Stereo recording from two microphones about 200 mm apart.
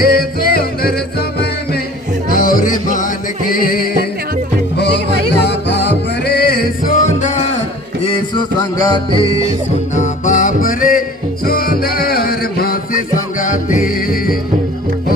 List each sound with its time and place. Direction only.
0.0 s music: 50° left (ahead or behind)
2.3 s music: 45° left (ahead or behind)
5.4 s music: 60° left (ahead or behind); by 7.5 s 35° left (ahead or behind)
8.0 s music: 25° left (ahead or behind)
9.9 s music: 40° left (ahead or behind)